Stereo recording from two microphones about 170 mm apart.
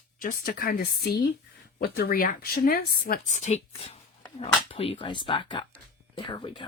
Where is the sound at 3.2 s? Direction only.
45° left (ahead or behind).